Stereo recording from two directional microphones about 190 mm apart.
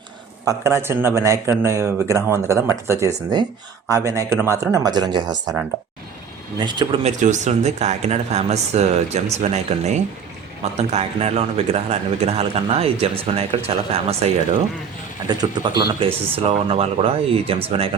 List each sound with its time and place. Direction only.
0.4 s speech: 15° right (ahead or behind)
6.7 s speech: 25° right (ahead or behind)
7.0 s a man's voice: 40° right (ahead or behind)